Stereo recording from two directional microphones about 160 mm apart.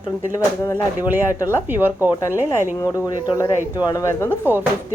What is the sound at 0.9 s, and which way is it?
Speech, 10° right (ahead or behind).